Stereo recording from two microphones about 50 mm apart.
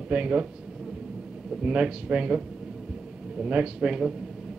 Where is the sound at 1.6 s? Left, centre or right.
Centre.